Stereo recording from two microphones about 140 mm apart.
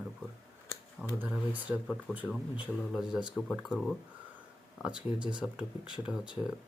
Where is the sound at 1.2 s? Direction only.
10° right (ahead or behind).